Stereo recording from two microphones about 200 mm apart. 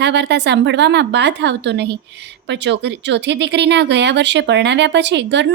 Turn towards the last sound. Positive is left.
turn(degrees=-60)  # may be behind; listen again after turning